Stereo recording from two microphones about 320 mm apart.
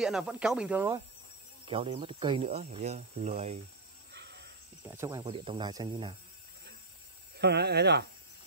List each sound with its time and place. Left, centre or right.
0.0 s speech: centre
1.7 s speech: centre
4.1 s a sound: right
4.8 s speech: centre
7.3 s speech: right